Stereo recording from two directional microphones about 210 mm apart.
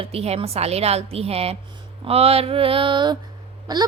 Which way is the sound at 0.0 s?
30° right (ahead or behind).